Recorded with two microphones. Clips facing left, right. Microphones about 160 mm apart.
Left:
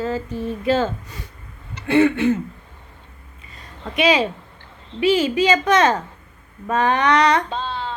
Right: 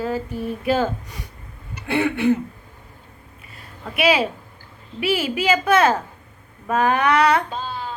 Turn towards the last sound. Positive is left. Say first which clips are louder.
# left 2 dB
turn(degrees=25)  # may be behind; listen again after turning